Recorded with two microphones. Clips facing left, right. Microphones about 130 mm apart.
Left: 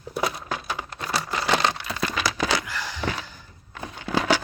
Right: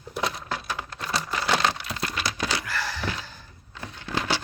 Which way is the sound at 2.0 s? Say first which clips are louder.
Left 5 dB; 90° left.